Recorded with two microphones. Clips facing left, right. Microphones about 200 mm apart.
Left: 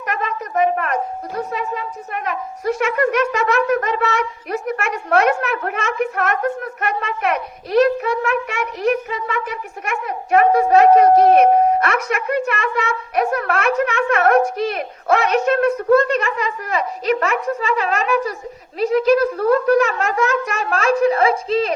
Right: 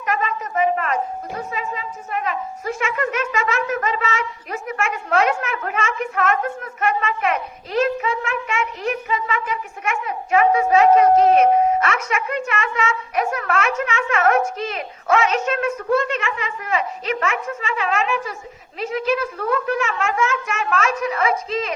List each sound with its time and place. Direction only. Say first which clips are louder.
0.0 s a woman's voice: right 1 dB; 60° left (ahead or behind)
15.9 s speech: left 5 dB; 40° left (ahead or behind)